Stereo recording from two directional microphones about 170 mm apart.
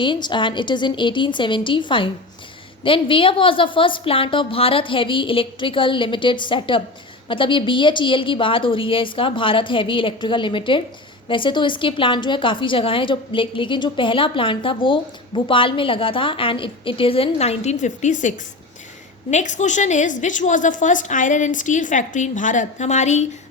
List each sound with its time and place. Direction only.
0.0 s a woman's voice: 25° left (ahead or behind); by 23.2 s 45° left (ahead or behind)